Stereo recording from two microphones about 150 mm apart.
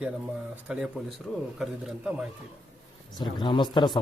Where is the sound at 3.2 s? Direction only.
30° left (ahead or behind).